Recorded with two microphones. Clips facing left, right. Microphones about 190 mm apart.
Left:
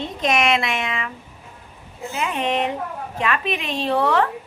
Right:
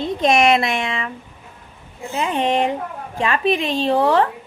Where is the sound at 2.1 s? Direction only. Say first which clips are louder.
Right 4 dB; 30° right (ahead or behind).